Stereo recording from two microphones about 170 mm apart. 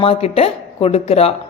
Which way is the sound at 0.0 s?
35° left (ahead or behind).